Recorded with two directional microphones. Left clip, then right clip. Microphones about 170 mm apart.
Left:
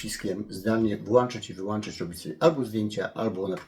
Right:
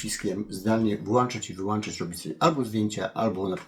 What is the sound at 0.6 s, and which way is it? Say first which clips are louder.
Speech: even; 20° right (ahead or behind).